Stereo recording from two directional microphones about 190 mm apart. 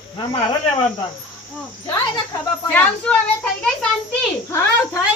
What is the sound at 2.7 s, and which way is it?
A child's voice, 5° left (ahead or behind).